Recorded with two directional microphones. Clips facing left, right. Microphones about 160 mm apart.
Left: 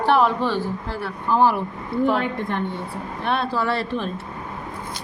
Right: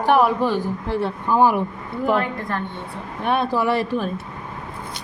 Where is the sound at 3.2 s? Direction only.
15° right (ahead or behind).